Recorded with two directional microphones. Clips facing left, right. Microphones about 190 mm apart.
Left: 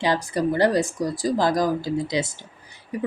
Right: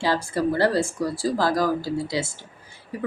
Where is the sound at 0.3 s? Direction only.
15° left (ahead or behind).